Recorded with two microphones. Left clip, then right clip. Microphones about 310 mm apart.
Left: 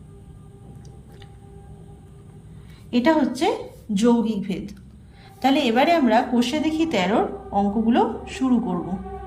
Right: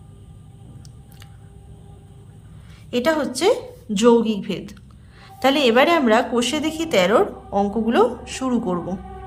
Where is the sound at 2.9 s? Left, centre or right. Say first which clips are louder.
Even; centre.